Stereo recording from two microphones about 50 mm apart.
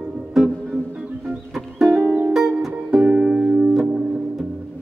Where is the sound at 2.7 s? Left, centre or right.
Right.